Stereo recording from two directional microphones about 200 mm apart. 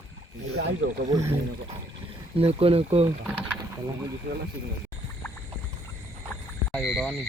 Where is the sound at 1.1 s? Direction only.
15° right (ahead or behind).